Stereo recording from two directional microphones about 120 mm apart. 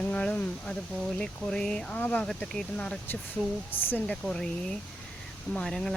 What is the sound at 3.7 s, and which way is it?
Speech, 15° left (ahead or behind).